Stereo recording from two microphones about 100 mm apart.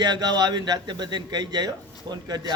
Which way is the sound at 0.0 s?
45° right (ahead or behind).